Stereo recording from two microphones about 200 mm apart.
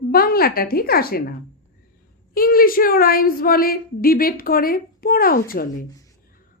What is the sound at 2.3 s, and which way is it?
Speech, 45° left (ahead or behind).